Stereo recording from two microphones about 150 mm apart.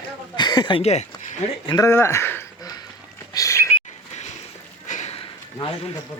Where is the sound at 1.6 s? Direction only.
25° left (ahead or behind).